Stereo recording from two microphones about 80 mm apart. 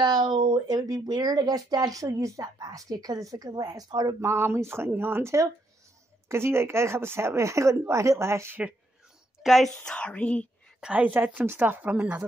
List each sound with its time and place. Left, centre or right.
0.0 s speech: right
4.2 s speech: right
9.4 s a woman's voice: centre
9.8 s a woman's voice: centre
10.8 s speech: centre